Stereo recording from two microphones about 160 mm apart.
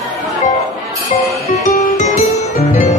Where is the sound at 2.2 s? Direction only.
45° left (ahead or behind).